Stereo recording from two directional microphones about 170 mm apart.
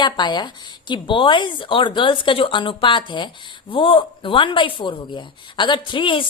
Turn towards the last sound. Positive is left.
turn(degrees=30)  # may be behind; listen again after turning